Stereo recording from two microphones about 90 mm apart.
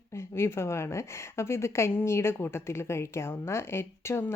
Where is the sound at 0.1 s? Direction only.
30° left (ahead or behind).